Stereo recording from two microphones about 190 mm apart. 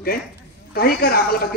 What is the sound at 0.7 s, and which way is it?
Speech, 55° left (ahead or behind).